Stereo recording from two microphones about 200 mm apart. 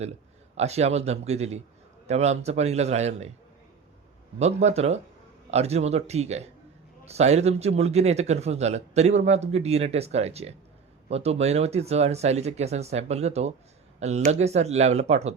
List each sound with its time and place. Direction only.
0.5 s a man's voice: 30° right (ahead or behind)
4.4 s a man's voice: 35° right (ahead or behind)